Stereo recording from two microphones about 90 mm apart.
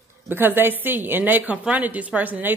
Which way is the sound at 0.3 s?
25° right (ahead or behind).